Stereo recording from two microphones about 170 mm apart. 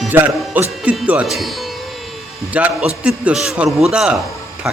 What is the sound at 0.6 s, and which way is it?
A man's voice, 10° right (ahead or behind).